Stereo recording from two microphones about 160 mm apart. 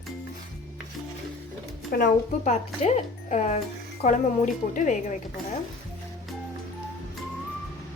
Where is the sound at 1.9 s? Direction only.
55° left (ahead or behind).